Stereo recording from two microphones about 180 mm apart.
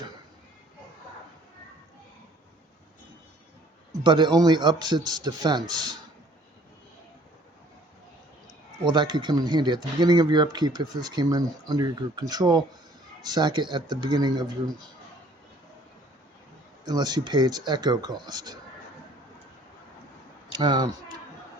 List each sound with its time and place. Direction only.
4.0 s speech: 25° right (ahead or behind)
8.8 s speech: 25° right (ahead or behind)
16.8 s speech: 25° right (ahead or behind)
20.5 s speech: 25° right (ahead or behind)